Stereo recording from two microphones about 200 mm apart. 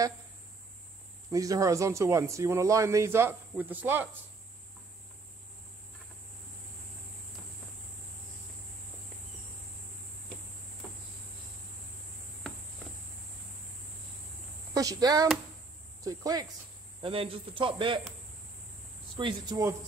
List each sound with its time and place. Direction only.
1.3 s speech: 15° right (ahead or behind)
14.7 s speech: 15° right (ahead or behind)
17.0 s speech: 25° right (ahead or behind)
19.1 s speech: 20° right (ahead or behind)